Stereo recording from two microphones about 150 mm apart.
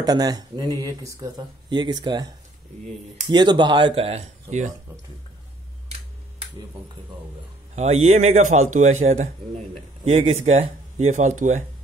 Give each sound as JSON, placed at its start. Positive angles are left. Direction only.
{"t": 0.0, "sound": "speech", "side_deg": -25}
{"t": 3.3, "sound": "speech", "side_deg": -30}
{"t": 7.7, "sound": "a man's voice", "side_deg": -45}